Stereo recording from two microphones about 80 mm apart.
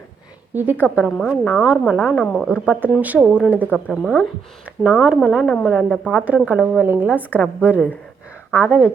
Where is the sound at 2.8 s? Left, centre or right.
Right.